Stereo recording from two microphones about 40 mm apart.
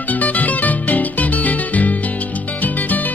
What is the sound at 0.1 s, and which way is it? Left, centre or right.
Music, left.